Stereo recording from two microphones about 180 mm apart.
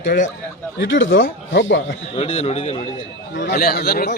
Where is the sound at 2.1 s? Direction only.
35° left (ahead or behind).